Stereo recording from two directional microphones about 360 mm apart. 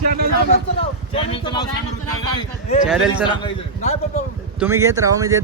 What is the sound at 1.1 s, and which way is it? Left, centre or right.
Speech, centre.